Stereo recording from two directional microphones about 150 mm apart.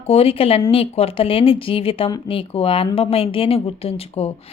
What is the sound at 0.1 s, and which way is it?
Speech, 40° left (ahead or behind).